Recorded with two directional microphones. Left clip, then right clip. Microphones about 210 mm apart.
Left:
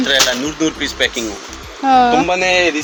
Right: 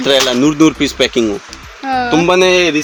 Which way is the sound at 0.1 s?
40° right (ahead or behind).